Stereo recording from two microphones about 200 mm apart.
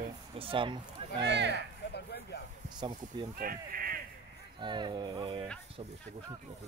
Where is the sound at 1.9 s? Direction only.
55° left (ahead or behind).